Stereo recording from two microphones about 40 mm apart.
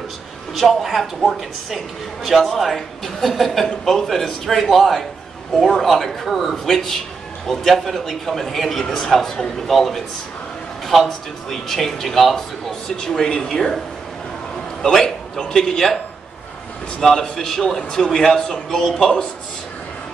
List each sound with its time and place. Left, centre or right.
0.6 s a man's voice: centre
12.8 s a man's voice: centre
14.8 s a man's voice: centre
17.0 s a man's voice: centre